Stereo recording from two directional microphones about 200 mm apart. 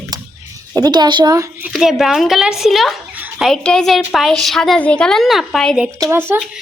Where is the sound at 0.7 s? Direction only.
20° right (ahead or behind).